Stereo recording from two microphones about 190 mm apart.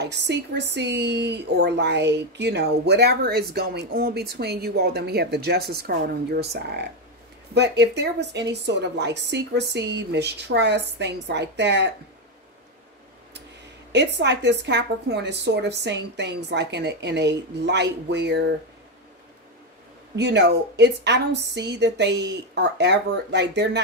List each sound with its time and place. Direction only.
0.0 s a woman's voice: 65° right (ahead or behind)
13.9 s a woman's voice: 65° right (ahead or behind)
20.2 s a woman's voice: 65° right (ahead or behind)